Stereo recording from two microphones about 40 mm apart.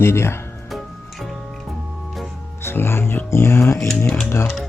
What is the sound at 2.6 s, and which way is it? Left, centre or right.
Speech, left.